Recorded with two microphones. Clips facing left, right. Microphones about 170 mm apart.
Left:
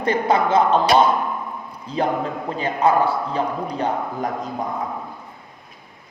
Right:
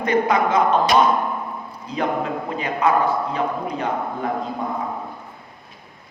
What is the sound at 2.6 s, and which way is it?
A man's voice, 30° left (ahead or behind).